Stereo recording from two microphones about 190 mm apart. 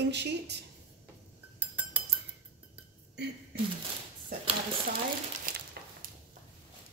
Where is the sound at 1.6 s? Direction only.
10° right (ahead or behind).